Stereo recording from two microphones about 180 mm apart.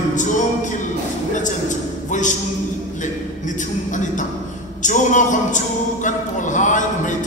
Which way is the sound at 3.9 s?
45° left (ahead or behind).